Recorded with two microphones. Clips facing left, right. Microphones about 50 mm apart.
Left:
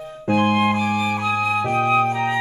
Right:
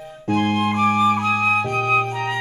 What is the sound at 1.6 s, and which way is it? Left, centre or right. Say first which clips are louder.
Flute: left 2 dB; centre.